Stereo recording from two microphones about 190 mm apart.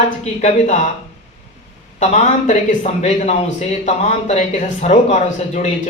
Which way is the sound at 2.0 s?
40° left (ahead or behind).